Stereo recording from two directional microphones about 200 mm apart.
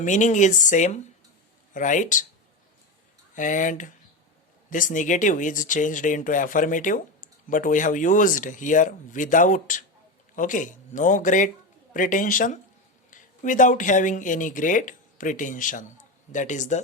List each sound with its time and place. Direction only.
0.0 s speech: 40° left (ahead or behind)
3.3 s speech: 40° left (ahead or behind)